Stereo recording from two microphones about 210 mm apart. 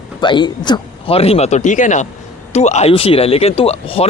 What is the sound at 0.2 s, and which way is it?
Speech, 20° left (ahead or behind).